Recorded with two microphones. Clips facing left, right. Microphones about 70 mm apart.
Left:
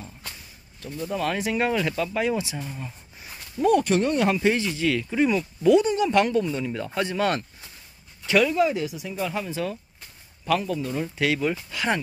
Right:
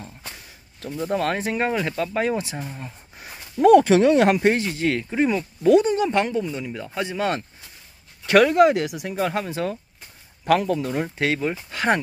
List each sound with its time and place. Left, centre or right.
1.0 s speech: right
2.2 s speech: right
2.6 s speech: right
3.5 s speech: right
4.4 s speech: right
5.7 s speech: right
6.0 s speech: right
6.4 s speech: centre
7.0 s speech: centre
8.3 s speech: right
10.4 s speech: right
10.9 s speech: right